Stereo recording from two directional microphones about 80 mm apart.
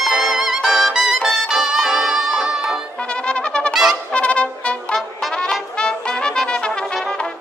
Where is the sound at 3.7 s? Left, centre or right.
Centre.